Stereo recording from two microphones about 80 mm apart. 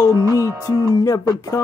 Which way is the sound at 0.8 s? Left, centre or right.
Left.